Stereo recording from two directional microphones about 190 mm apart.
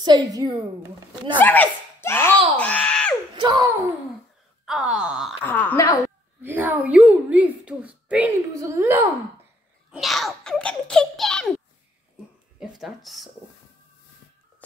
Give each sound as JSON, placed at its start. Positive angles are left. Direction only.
{"t": 0.0, "sound": "a woman's voice", "side_deg": -20}
{"t": 1.4, "sound": "a child's voice", "side_deg": 10}
{"t": 2.5, "sound": "screaming", "side_deg": 5}
{"t": 3.3, "sound": "a sound", "side_deg": -20}
{"t": 4.6, "sound": "wail", "side_deg": -5}
{"t": 5.4, "sound": "a sound", "side_deg": 10}
{"t": 6.4, "sound": "a sound", "side_deg": -10}
{"t": 9.8, "sound": "a child's voice", "side_deg": 0}
{"t": 12.5, "sound": "speech", "side_deg": 0}